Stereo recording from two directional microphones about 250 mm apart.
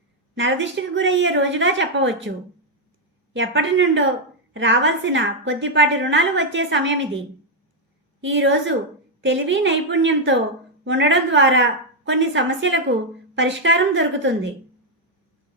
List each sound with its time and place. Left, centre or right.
0.3 s a woman's voice: right
3.3 s a woman's voice: right
8.2 s a woman's voice: right